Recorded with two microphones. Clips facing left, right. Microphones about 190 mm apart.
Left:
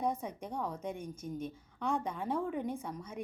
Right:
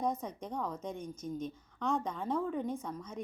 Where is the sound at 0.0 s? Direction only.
10° left (ahead or behind).